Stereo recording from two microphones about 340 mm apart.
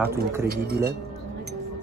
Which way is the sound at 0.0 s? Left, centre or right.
Centre.